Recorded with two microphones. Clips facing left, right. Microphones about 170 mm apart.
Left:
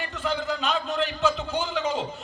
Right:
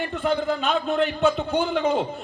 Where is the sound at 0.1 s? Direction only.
55° right (ahead or behind).